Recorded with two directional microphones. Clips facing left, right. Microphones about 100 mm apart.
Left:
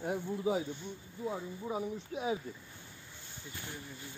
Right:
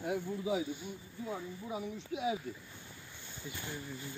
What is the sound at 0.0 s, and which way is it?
Speech, 35° left (ahead or behind).